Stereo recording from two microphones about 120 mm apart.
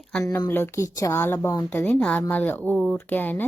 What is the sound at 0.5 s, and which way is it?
Speech, 20° left (ahead or behind).